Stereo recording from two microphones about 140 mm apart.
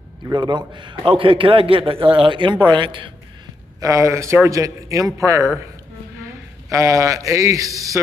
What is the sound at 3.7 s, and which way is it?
A man's voice, 25° right (ahead or behind).